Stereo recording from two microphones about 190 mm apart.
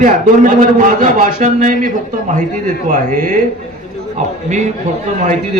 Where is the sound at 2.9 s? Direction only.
40° right (ahead or behind).